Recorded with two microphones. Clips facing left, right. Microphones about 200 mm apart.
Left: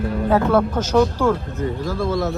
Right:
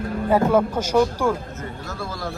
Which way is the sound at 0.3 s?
10° right (ahead or behind).